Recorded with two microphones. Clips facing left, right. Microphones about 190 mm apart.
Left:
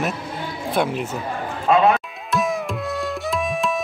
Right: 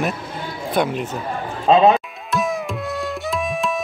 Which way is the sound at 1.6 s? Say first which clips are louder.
Right 3 dB; 25° right (ahead or behind).